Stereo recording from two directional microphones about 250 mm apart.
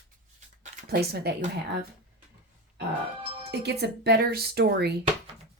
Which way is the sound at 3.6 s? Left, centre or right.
Right.